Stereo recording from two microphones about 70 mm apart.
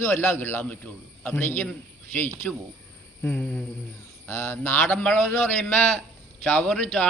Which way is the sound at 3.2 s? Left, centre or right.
Left.